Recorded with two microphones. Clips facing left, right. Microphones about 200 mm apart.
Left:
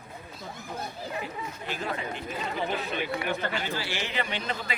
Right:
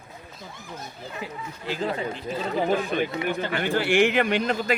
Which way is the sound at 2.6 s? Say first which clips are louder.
Right 8 dB; 45° right (ahead or behind).